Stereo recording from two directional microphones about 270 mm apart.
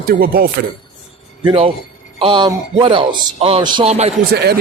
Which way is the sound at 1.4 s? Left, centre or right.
Centre.